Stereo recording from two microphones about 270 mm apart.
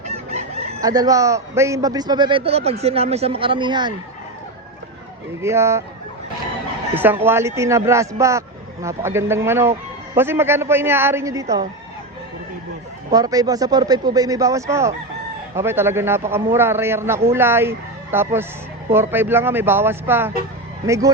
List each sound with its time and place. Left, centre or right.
0.0 s chicken: right
0.8 s a man's voice: centre
5.4 s a man's voice: centre
6.9 s a man's voice: centre
13.1 s a man's voice: centre